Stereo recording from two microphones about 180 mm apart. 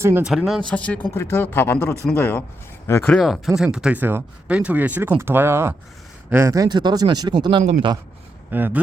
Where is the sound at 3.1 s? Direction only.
Centre (ahead or behind); by 8.0 s 25° right (ahead or behind).